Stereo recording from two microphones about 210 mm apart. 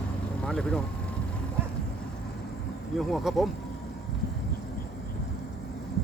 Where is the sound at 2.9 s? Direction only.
Centre (ahead or behind).